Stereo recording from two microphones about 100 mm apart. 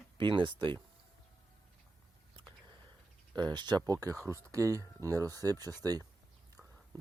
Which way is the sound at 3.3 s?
45° right (ahead or behind).